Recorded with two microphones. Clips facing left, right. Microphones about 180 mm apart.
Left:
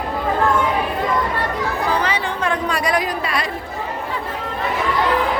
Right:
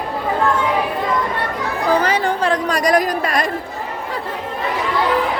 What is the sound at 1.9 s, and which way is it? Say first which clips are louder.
Chatter: right 4 dB; 45° right (ahead or behind).